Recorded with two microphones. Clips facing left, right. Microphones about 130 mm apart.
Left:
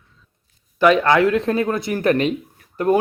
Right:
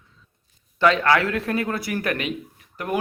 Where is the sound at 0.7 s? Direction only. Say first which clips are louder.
Left 4 dB; 15° left (ahead or behind).